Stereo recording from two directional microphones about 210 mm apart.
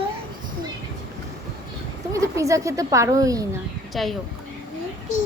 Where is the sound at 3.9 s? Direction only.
Centre (ahead or behind).